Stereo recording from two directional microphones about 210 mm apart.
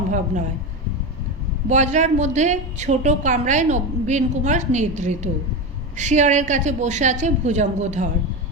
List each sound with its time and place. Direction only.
1.6 s a woman's voice: 35° right (ahead or behind)